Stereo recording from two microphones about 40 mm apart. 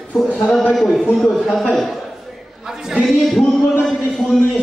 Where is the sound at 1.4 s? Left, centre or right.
Centre.